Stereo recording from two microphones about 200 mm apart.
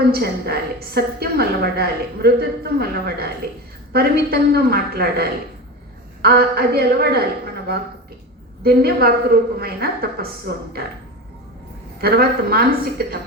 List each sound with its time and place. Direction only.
0.0 s a woman's voice: 50° right (ahead or behind)
8.6 s a woman's voice: 50° right (ahead or behind)
11.9 s a woman's voice: 50° right (ahead or behind)